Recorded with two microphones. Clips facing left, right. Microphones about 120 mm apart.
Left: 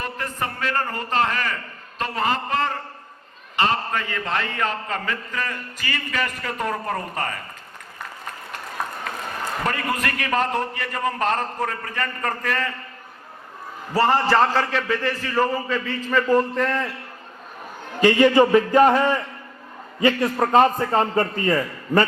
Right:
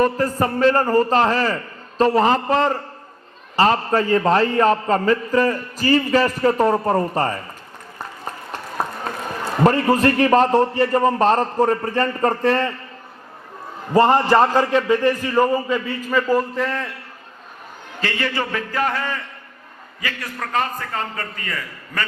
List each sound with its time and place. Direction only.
0.0 s a man's voice: 40° right (ahead or behind)
9.6 s a man's voice: 30° right (ahead or behind)
13.9 s a man's voice: 20° right (ahead or behind); by 16.9 s centre (ahead or behind)
18.0 s a man's voice: 15° left (ahead or behind)